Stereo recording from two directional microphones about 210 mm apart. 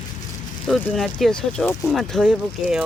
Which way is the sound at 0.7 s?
Centre (ahead or behind).